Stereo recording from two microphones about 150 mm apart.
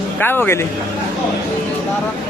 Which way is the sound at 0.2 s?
15° left (ahead or behind).